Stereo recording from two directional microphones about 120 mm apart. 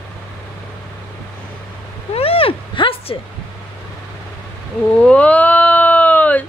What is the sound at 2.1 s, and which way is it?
Vehicle, 55° left (ahead or behind).